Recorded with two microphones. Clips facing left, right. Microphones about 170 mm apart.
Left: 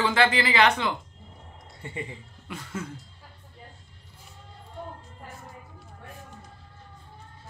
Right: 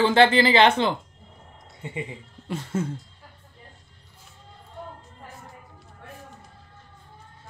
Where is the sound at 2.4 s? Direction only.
30° right (ahead or behind).